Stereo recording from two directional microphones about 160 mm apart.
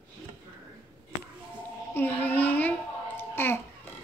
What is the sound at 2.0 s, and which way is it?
Child singing, 10° left (ahead or behind).